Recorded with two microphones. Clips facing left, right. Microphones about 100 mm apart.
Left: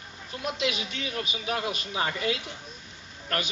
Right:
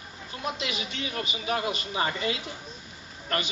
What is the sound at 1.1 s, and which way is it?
A woman's voice, 20° right (ahead or behind).